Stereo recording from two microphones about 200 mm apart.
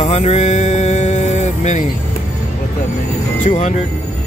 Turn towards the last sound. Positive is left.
turn(degrees=30)  # may be behind; listen again after turning